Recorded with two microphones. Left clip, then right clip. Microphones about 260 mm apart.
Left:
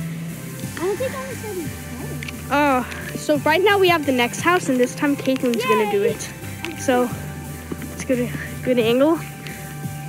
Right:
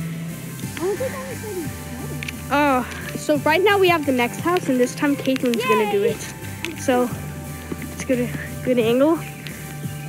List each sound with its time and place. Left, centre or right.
0.7 s music: centre
2.5 s speech: centre
6.6 s music: centre
8.1 s speech: centre